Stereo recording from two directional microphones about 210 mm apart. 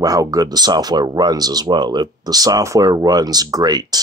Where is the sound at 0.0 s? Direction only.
15° right (ahead or behind).